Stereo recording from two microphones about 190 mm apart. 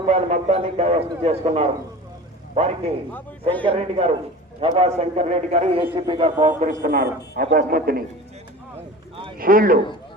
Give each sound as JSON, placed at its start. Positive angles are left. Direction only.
{"t": 0.1, "sound": "a man's voice", "side_deg": -35}
{"t": 3.6, "sound": "a man's voice", "side_deg": -30}
{"t": 6.5, "sound": "a man's voice", "side_deg": -45}
{"t": 9.4, "sound": "a man's voice", "side_deg": -50}